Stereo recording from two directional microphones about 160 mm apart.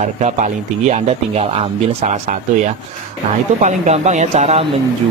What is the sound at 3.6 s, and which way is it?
Speech, 45° right (ahead or behind).